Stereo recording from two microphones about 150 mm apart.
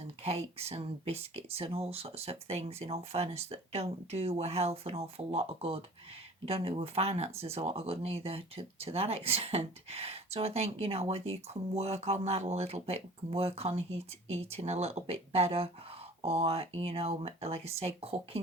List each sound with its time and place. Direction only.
0.0 s speech: 45° right (ahead or behind)